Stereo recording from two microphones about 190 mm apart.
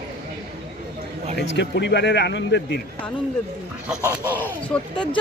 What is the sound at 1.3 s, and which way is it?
Speech, 65° left (ahead or behind).